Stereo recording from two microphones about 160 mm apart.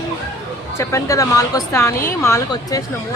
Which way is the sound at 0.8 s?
20° left (ahead or behind).